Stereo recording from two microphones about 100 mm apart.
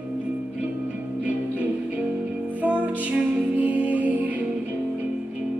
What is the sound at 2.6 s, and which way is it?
Music, 15° right (ahead or behind).